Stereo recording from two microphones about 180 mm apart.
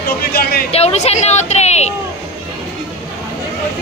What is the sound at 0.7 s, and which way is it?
Speech, 35° left (ahead or behind).